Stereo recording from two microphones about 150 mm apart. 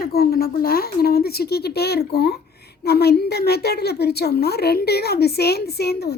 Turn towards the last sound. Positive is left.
turn(degrees=90)